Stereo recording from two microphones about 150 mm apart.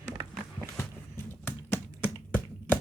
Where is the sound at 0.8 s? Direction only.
15° left (ahead or behind).